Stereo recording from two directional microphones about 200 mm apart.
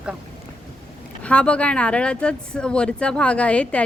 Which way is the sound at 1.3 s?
5° left (ahead or behind).